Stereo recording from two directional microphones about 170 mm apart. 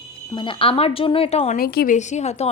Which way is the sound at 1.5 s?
60° left (ahead or behind).